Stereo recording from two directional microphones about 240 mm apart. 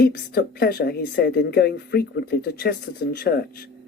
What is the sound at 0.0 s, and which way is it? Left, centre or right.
A man's voice, left.